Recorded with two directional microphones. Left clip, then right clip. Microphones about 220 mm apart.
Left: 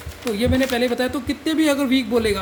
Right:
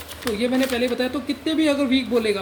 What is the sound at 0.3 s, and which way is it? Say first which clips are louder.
A man's voice: left 2 dB; 25° left (ahead or behind).